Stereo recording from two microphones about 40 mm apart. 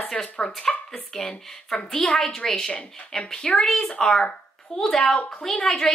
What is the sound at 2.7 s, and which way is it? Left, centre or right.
Speech, left.